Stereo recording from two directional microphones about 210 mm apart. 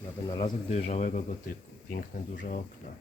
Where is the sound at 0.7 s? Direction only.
30° left (ahead or behind).